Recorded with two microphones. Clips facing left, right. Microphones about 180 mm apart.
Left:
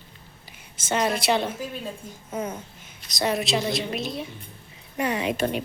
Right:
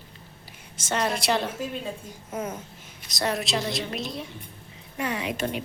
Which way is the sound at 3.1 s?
Centre (ahead or behind).